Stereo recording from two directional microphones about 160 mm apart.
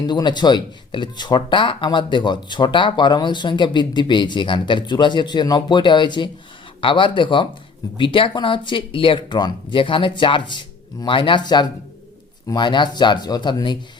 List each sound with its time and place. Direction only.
0.0 s speech: 25° left (ahead or behind)